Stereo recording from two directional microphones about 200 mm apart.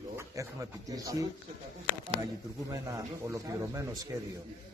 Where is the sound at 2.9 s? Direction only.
15° right (ahead or behind).